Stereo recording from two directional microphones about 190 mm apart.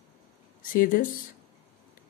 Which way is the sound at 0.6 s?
45° left (ahead or behind).